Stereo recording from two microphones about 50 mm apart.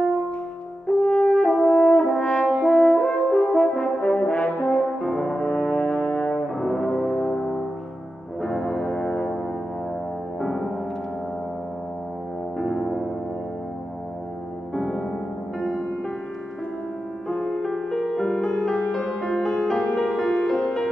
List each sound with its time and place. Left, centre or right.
0.8 s french horn: centre
5.4 s brass instrument: left
6.5 s music: centre
6.8 s music: centre
10.4 s music: centre
12.5 s music: centre
14.7 s music: centre
17.3 s music: centre